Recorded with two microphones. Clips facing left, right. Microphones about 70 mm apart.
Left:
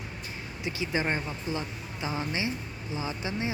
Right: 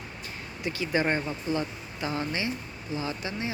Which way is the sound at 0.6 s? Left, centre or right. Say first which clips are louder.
Right 3 dB; centre.